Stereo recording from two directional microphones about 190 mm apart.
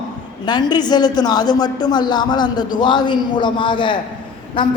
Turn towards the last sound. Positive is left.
turn(degrees=25)  # may be behind; listen again after turning